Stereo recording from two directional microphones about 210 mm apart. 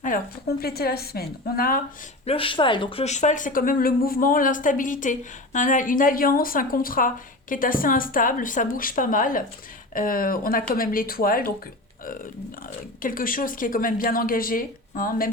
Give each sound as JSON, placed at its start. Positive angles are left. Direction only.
{"t": 0.0, "sound": "a woman's voice", "side_deg": 45}
{"t": 2.2, "sound": "a woman's voice", "side_deg": 25}
{"t": 13.0, "sound": "a woman's voice", "side_deg": 40}